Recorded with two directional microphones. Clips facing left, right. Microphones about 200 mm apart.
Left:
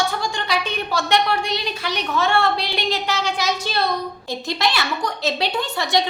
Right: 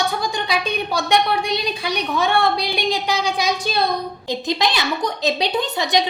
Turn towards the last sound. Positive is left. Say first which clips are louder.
# right 2 dB
turn(degrees=-20)  # may be behind; listen again after turning